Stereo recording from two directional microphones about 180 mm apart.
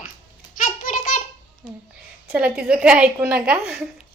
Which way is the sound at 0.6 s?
45° left (ahead or behind).